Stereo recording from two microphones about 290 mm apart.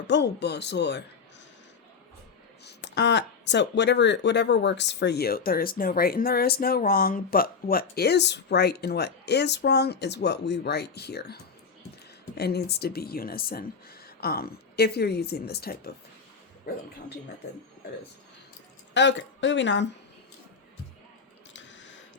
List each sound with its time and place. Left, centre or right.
0.1 s speech: left
2.6 s speech: left
18.9 s speech: left